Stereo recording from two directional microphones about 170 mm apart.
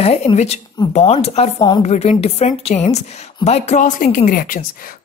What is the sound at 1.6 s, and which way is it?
Speech, 25° left (ahead or behind).